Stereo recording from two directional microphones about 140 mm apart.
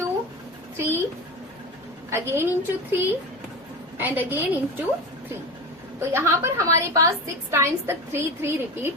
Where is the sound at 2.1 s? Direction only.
15° right (ahead or behind).